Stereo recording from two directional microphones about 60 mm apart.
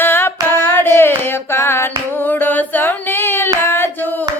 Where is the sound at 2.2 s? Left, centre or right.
Left.